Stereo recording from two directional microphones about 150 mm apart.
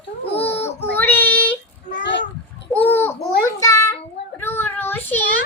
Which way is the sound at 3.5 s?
20° left (ahead or behind).